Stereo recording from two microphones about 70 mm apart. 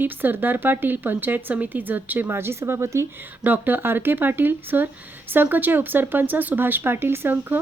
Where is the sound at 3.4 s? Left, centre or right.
Right.